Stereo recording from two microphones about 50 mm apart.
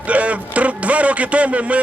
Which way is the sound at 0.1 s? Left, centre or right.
Right.